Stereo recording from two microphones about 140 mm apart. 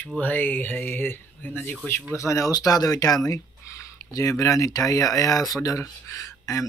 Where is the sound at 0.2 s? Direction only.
10° left (ahead or behind).